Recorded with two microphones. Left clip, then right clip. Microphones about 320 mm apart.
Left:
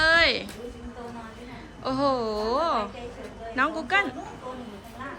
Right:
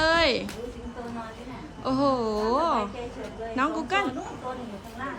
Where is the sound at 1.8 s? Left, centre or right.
Centre.